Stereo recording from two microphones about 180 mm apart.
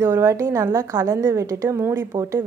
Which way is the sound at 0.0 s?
15° right (ahead or behind).